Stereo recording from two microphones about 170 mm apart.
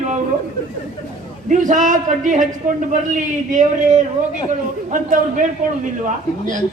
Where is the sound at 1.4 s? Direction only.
50° right (ahead or behind).